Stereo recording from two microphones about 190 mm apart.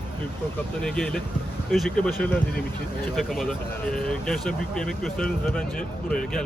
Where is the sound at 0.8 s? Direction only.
5° left (ahead or behind).